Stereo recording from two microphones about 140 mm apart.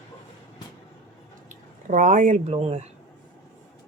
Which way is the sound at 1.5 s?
65° right (ahead or behind).